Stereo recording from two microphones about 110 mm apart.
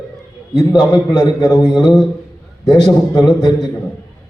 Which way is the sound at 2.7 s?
35° left (ahead or behind).